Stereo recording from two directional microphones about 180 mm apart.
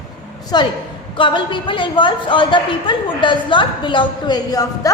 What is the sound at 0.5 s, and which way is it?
A woman's voice, 25° left (ahead or behind).